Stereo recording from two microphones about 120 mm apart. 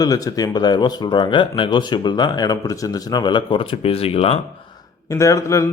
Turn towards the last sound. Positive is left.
turn(degrees=25)  # may be behind; listen again after turning